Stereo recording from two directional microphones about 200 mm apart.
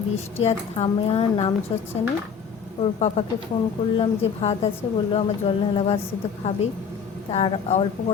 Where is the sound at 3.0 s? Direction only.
30° left (ahead or behind).